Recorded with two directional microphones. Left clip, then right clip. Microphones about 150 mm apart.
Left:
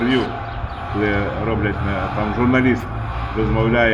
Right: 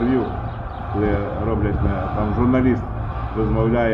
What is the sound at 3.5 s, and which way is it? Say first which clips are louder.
Speech: left 3 dB; 5° left (ahead or behind).